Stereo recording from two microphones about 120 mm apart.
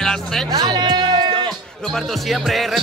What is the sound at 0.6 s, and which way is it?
Music, 35° right (ahead or behind).